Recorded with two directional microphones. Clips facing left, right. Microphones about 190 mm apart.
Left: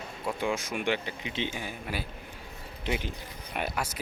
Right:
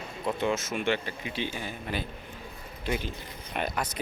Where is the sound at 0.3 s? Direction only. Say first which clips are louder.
Right 1 dB; 10° left (ahead or behind).